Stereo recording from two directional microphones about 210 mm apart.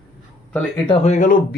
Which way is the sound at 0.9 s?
35° left (ahead or behind).